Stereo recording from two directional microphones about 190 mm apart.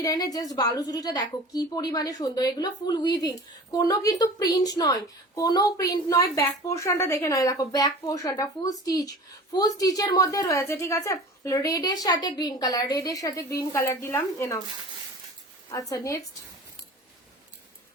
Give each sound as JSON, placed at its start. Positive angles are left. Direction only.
{"t": 0.0, "sound": "a woman's voice", "side_deg": 20}
{"t": 15.7, "sound": "a woman's voice", "side_deg": 15}